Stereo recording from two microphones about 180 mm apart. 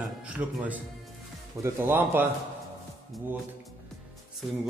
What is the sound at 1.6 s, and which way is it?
Speech, 15° right (ahead or behind).